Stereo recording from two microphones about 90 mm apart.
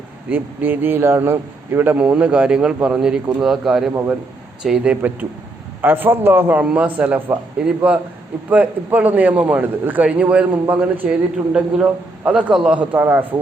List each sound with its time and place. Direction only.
0.3 s a man's voice: 20° right (ahead or behind)